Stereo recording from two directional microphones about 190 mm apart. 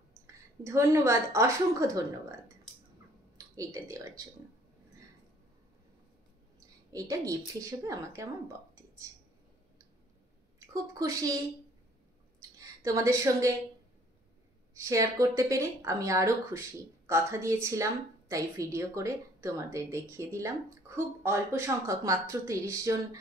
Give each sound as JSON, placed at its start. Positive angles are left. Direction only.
{"t": 0.3, "sound": "speech", "side_deg": -15}
{"t": 3.3, "sound": "speech", "side_deg": -15}
{"t": 6.9, "sound": "speech", "side_deg": -15}
{"t": 10.7, "sound": "speech", "side_deg": -15}
{"t": 12.4, "sound": "a woman's voice", "side_deg": -20}
{"t": 14.7, "sound": "speech", "side_deg": -15}